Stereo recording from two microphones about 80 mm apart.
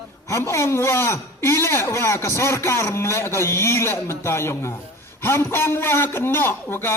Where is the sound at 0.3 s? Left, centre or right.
Left.